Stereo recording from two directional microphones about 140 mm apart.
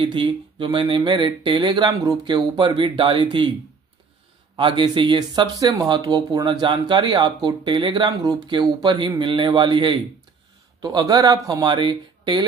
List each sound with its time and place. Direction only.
0.0 s speech: 35° right (ahead or behind)
4.6 s speech: 35° right (ahead or behind)